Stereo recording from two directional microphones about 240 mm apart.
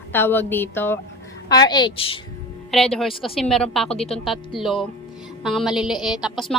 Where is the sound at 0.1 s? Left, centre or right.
Centre.